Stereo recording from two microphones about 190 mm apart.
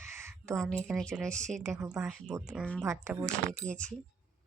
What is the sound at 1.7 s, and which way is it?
Speech, 15° right (ahead or behind).